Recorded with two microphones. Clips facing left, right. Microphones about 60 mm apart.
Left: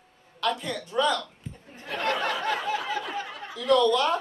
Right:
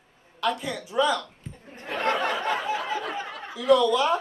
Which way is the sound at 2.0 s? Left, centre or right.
Right.